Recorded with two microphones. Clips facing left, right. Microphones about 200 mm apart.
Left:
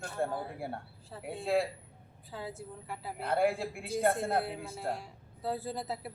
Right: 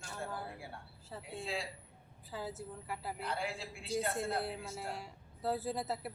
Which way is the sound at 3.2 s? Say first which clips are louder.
Left 14 dB; 55° left (ahead or behind).